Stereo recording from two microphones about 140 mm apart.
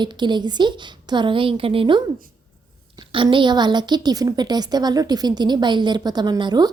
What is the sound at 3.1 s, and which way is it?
A woman's voice, 35° right (ahead or behind).